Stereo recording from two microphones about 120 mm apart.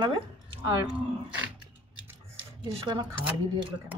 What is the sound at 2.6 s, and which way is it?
Speech, 40° right (ahead or behind).